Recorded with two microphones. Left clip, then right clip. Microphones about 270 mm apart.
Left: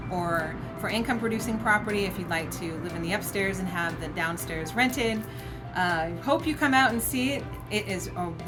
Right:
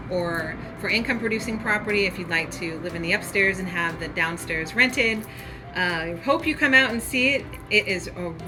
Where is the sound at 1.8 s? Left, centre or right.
Centre.